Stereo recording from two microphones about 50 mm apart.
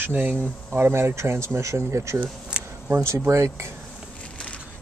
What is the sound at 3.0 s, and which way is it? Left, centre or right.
Speech, right.